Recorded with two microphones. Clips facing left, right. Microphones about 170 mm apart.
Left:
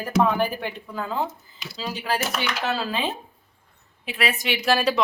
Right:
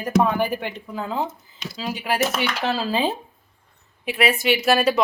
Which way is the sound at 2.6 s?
30° right (ahead or behind).